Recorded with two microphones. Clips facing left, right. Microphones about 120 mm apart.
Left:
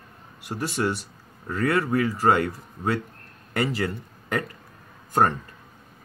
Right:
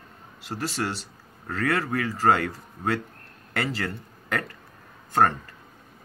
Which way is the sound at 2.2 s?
20° left (ahead or behind).